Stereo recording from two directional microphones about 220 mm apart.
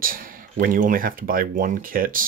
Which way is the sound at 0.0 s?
40° right (ahead or behind).